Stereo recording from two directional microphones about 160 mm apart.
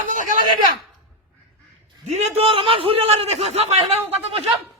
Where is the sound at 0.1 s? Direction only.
55° right (ahead or behind).